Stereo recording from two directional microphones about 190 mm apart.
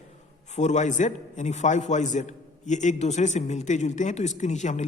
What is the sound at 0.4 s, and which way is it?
A man's voice, 40° left (ahead or behind).